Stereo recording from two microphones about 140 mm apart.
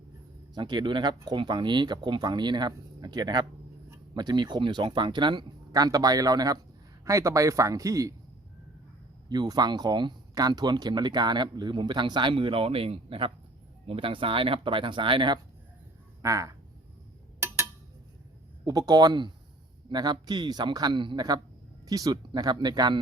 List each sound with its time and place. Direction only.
0.5 s a man's voice: 30° right (ahead or behind)
9.3 s speech: 30° right (ahead or behind)
16.2 s a man's voice: 25° right (ahead or behind)
18.6 s a man's voice: 25° right (ahead or behind)